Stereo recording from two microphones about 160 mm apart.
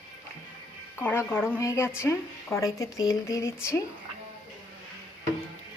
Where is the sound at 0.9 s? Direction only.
15° left (ahead or behind).